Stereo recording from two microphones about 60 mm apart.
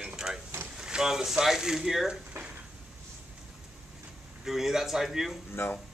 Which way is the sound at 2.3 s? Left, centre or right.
Right.